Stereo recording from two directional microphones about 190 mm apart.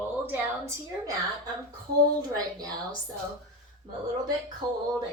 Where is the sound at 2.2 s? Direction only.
20° right (ahead or behind).